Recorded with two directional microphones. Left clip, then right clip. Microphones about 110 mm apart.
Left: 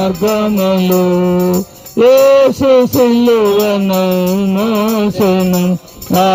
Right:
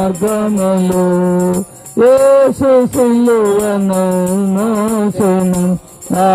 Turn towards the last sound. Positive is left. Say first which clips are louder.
# left 1 dB
turn(degrees=10)  # may be behind; listen again after turning